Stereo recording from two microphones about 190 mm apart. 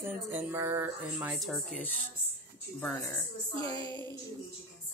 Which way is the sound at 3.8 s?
25° right (ahead or behind).